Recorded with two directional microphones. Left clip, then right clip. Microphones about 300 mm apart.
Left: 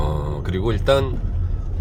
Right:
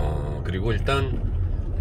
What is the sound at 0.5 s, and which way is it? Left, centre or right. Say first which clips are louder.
Speech: left 7 dB; centre.